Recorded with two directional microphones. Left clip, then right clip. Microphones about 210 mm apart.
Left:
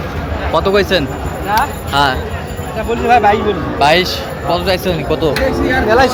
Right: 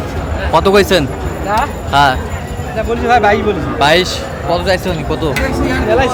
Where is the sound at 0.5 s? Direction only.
20° right (ahead or behind).